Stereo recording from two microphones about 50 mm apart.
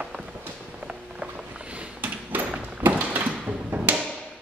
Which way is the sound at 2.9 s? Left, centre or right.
Right.